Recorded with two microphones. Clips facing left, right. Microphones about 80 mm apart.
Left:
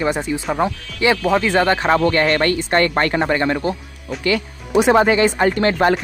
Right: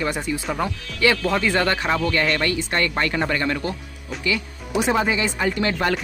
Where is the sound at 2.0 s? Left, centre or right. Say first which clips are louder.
Left 6 dB; left.